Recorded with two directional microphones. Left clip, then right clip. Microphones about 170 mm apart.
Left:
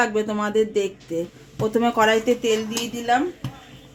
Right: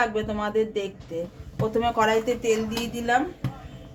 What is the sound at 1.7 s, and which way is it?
Speech, 60° left (ahead or behind).